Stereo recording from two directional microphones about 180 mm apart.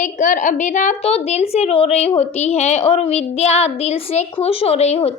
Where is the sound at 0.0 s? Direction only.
45° left (ahead or behind).